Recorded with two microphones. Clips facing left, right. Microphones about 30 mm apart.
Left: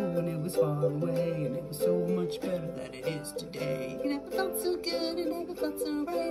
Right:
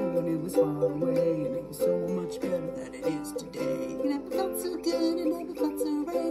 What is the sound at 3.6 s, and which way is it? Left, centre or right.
Music, left.